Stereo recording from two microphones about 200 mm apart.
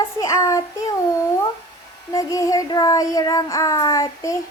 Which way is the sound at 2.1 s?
15° left (ahead or behind).